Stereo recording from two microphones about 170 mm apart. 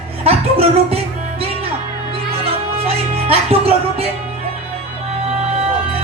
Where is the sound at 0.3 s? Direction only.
35° right (ahead or behind).